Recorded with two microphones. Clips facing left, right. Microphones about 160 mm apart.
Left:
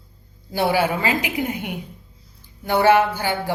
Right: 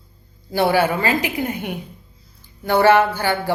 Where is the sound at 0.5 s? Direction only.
15° left (ahead or behind).